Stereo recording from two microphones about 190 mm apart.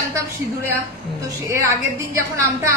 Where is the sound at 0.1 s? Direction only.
15° right (ahead or behind).